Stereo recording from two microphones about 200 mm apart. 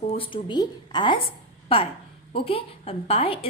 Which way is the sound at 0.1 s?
25° left (ahead or behind).